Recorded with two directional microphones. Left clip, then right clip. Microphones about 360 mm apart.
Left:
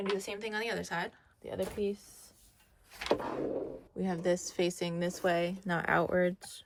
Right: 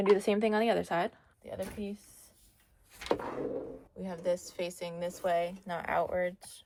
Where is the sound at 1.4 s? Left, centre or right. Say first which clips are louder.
Left 5 dB; left.